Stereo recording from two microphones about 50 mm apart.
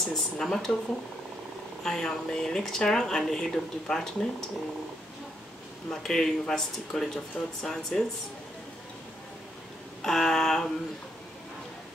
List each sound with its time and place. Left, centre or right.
0.0 s speech: centre
1.8 s speech: centre
5.9 s speech: centre
10.0 s a sound: centre